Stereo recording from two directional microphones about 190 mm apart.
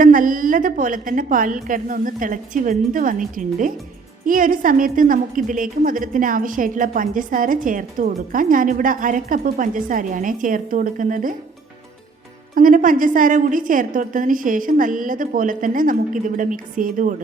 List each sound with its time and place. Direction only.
0.0 s a woman's voice: 45° right (ahead or behind)
12.5 s a woman's voice: 45° right (ahead or behind)